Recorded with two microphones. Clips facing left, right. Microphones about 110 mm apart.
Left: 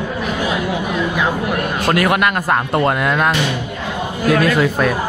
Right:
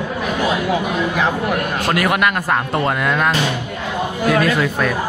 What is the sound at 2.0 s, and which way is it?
Speech, centre (ahead or behind).